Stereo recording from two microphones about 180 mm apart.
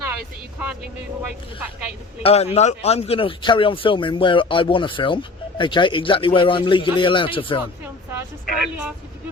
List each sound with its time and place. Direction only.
2.2 s a man's voice: 35° left (ahead or behind)
8.4 s speech: 5° right (ahead or behind)